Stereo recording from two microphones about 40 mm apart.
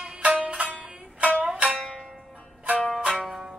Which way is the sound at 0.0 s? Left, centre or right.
Right.